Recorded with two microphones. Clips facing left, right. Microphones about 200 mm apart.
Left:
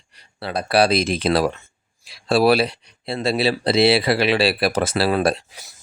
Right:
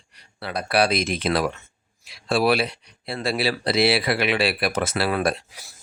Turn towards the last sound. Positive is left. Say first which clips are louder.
# left 4 dB
turn(degrees=30)  # may be behind; listen again after turning